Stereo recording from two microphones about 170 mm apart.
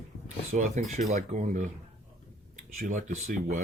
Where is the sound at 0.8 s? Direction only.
45° right (ahead or behind).